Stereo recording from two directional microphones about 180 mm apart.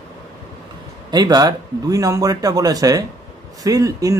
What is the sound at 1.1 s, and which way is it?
Speech, 20° right (ahead or behind).